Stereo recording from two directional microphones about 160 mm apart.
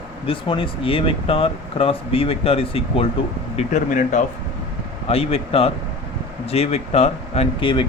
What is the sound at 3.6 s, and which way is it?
Speech, 50° left (ahead or behind).